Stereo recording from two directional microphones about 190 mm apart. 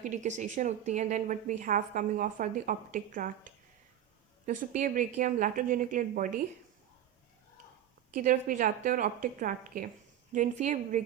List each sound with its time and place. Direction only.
0.0 s a woman's voice: 40° right (ahead or behind)
8.1 s a woman's voice: 45° right (ahead or behind)